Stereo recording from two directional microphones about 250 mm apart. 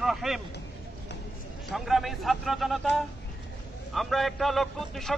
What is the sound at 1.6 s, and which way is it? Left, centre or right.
A man's voice, centre.